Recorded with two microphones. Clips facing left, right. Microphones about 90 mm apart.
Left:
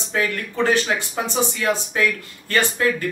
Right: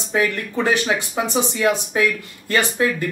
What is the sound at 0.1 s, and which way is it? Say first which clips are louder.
Speech: right 3 dB; 15° right (ahead or behind).